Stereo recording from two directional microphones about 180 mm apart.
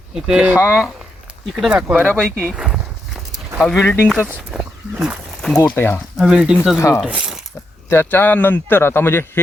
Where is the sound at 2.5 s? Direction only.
5° right (ahead or behind).